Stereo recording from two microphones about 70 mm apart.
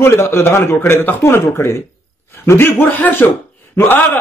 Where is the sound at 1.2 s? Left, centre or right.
Left.